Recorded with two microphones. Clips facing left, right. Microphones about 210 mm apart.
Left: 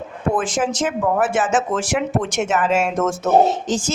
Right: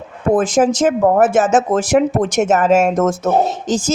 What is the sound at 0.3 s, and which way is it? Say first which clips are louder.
A woman's voice: right 9 dB; 40° right (ahead or behind).